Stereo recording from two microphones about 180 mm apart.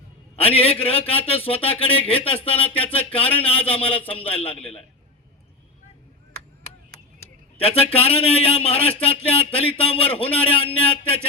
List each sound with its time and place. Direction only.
0.3 s speech: 30° left (ahead or behind)
7.6 s speech: 35° left (ahead or behind)